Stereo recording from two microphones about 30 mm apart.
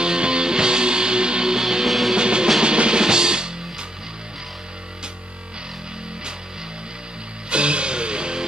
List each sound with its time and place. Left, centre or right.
0.0 s music: right
1.9 s music: centre
2.1 s music: right
7.4 s music: right